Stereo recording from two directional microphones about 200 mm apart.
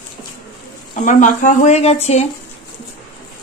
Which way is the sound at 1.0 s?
40° left (ahead or behind).